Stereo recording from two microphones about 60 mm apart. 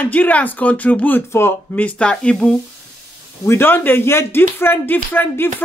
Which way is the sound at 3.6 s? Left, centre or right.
Left.